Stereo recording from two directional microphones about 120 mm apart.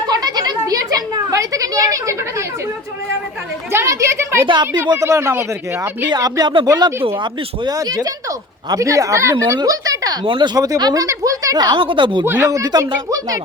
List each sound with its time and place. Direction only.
0.1 s a sound: 35° right (ahead or behind)
3.7 s speech: 20° right (ahead or behind)
6.1 s speech: 30° right (ahead or behind)
9.6 s a sound: 30° right (ahead or behind)
10.2 s speech: 40° right (ahead or behind)
12.2 s speech: 20° right (ahead or behind)